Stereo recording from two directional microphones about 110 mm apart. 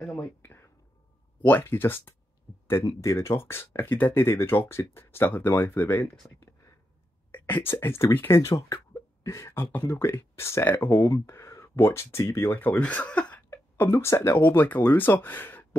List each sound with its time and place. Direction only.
0.0 s whispering: 15° left (ahead or behind)
1.4 s speech: 20° left (ahead or behind)
7.3 s a sound: 15° left (ahead or behind)
7.7 s speech: 25° left (ahead or behind)
8.4 s speech: 30° left (ahead or behind)